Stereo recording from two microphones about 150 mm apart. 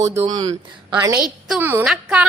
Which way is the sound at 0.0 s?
20° right (ahead or behind).